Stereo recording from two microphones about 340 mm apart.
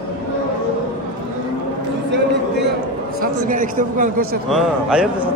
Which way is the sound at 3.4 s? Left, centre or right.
Right.